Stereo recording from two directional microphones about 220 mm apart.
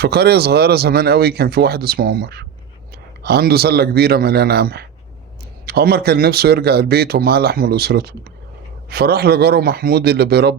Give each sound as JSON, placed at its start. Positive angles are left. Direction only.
{"t": 0.0, "sound": "speech", "side_deg": -45}